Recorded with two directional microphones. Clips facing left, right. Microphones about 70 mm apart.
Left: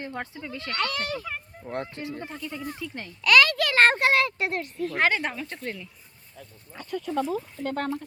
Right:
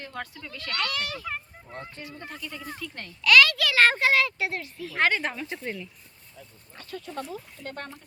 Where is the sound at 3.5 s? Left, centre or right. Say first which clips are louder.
Left 1 dB; left.